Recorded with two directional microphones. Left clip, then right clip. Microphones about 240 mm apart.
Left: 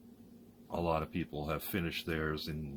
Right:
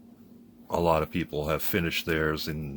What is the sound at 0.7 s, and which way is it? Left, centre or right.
Speech, right.